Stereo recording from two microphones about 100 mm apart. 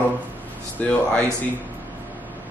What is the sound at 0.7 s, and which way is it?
Speech, 10° left (ahead or behind).